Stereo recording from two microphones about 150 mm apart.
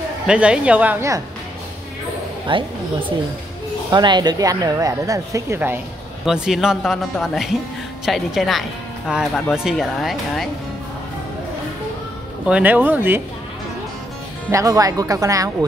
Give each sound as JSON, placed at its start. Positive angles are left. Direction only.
{"t": 0.3, "sound": "a woman's voice", "side_deg": -5}
{"t": 2.5, "sound": "a woman's voice", "side_deg": -35}
{"t": 3.9, "sound": "a woman's voice", "side_deg": -30}
{"t": 6.2, "sound": "speech", "side_deg": -5}
{"t": 12.4, "sound": "a woman's voice", "side_deg": -10}
{"t": 14.5, "sound": "a woman's voice", "side_deg": -20}